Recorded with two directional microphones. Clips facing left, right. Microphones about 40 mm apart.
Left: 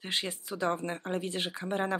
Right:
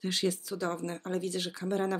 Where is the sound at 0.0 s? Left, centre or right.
Left.